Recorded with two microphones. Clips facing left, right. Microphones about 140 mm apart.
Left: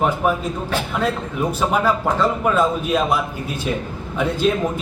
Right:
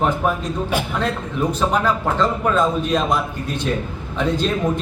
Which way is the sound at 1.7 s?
5° left (ahead or behind).